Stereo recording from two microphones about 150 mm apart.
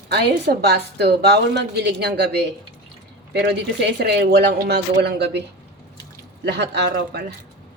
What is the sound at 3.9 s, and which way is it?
Speech, 90° right.